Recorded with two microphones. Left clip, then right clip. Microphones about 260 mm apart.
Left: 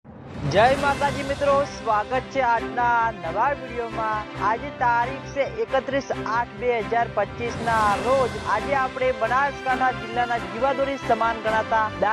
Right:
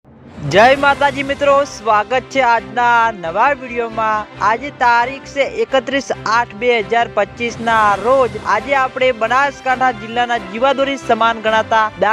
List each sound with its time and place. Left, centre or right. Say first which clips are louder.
0.4 s speech: right 9 dB; right